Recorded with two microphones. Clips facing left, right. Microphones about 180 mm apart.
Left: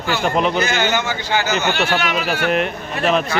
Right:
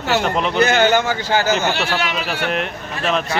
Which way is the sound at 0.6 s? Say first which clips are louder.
Right 4 dB; 55° right (ahead or behind).